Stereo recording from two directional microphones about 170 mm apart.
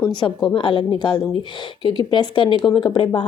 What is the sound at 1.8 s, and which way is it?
A woman's voice, 25° left (ahead or behind).